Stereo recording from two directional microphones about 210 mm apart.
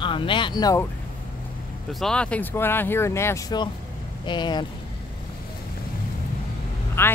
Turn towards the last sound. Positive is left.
turn(degrees=10)  # may be behind; listen again after turning